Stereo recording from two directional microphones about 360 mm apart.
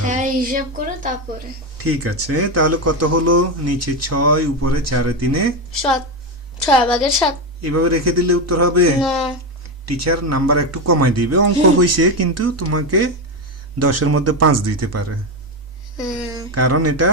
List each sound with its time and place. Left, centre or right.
0.1 s a sound: right
1.8 s speech: right
5.7 s a woman's voice: centre
7.6 s speech: right
9.0 s a woman's voice: centre
9.8 s speech: right
16.0 s a woman's voice: centre
16.6 s speech: right